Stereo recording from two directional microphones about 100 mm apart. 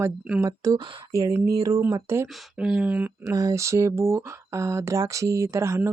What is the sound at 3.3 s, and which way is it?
Speech, 35° right (ahead or behind).